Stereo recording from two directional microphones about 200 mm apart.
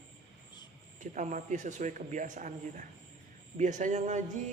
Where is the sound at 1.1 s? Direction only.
40° right (ahead or behind).